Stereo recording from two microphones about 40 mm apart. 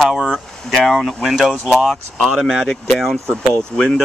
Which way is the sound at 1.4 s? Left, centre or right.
Centre.